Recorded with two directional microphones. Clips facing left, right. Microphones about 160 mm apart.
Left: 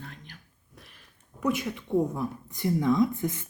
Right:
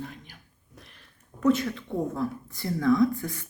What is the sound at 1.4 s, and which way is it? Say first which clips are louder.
A woman's voice: right 5 dB; 15° left (ahead or behind).